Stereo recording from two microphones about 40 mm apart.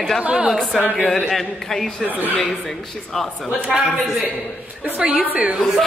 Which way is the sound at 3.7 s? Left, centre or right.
Centre.